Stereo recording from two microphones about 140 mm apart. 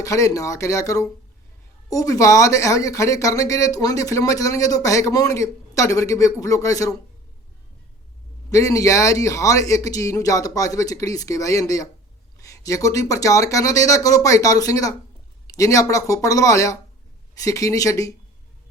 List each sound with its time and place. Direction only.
0.0 s speech: 25° left (ahead or behind)
8.4 s speech: 25° left (ahead or behind)